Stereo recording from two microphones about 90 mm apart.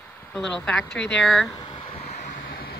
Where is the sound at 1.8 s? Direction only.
90° left.